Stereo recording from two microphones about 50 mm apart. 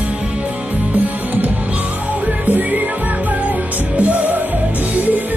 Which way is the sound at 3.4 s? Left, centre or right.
Right.